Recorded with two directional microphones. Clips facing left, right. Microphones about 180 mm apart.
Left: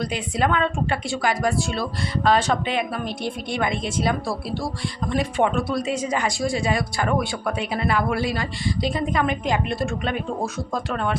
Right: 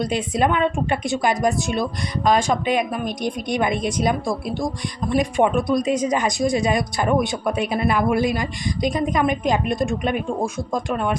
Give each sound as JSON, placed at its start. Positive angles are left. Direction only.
{"t": 0.0, "sound": "a woman's voice", "side_deg": -20}